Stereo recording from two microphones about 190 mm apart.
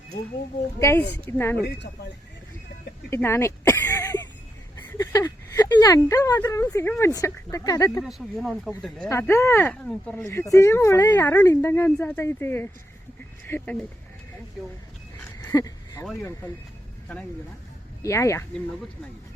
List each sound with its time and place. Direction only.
0.8 s speech: 10° left (ahead or behind)
3.1 s a sound: 15° left (ahead or behind)
4.9 s speech: 15° left (ahead or behind)
8.0 s speech: centre (ahead or behind)
9.0 s speech: 15° left (ahead or behind)
15.4 s a sound: 15° left (ahead or behind)
18.0 s speech: 15° left (ahead or behind)